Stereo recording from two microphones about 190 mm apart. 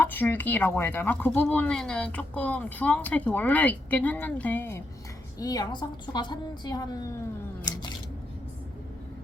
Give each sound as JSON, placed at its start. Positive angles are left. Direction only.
{"t": 0.0, "sound": "a woman's voice", "side_deg": 10}